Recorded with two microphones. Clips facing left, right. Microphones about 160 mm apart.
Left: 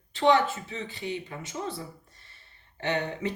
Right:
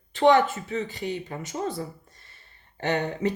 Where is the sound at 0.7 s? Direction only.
40° right (ahead or behind).